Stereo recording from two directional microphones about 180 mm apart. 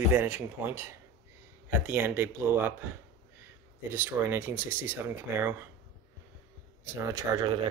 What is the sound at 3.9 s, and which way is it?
Speech, 10° right (ahead or behind).